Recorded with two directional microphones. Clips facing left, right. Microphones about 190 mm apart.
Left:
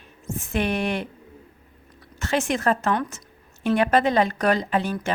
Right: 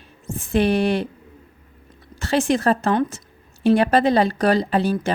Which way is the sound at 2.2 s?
35° right (ahead or behind).